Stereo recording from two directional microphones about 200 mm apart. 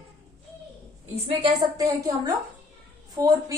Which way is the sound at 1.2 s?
30° right (ahead or behind).